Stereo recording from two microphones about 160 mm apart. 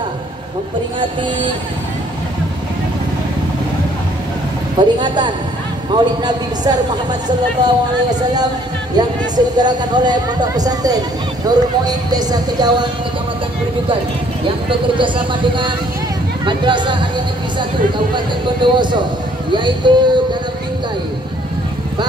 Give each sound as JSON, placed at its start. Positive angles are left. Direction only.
{"t": 4.7, "sound": "a man's voice", "side_deg": -30}
{"t": 14.7, "sound": "a man's voice", "side_deg": -30}